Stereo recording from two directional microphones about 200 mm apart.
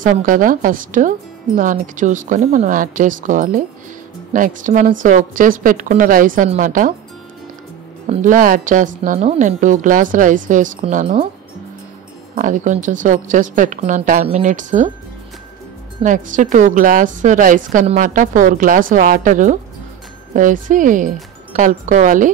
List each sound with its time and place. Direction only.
0.0 s a woman's voice: 40° right (ahead or behind)
8.1 s a woman's voice: 40° right (ahead or behind)
12.4 s a woman's voice: 40° right (ahead or behind)
16.0 s a woman's voice: 40° right (ahead or behind)